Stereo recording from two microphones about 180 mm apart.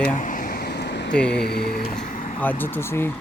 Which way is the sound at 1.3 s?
65° left (ahead or behind).